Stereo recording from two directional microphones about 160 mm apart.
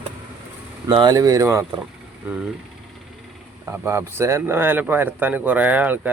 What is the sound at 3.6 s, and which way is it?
Speech, 15° right (ahead or behind).